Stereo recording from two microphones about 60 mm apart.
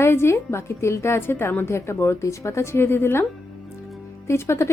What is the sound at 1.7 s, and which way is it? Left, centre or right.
A woman's voice, left.